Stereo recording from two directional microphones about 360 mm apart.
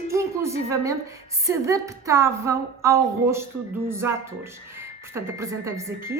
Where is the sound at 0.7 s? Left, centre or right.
Centre.